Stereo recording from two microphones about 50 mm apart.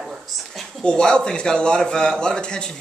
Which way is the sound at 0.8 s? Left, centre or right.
Centre.